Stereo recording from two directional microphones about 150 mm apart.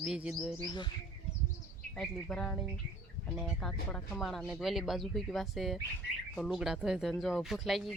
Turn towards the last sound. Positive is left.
turn(degrees=0)  # may be behind; listen again after turning